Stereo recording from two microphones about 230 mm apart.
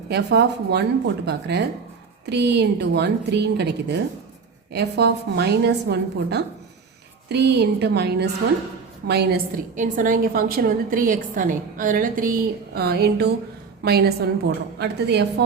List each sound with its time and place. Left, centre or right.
0.1 s a woman's voice: right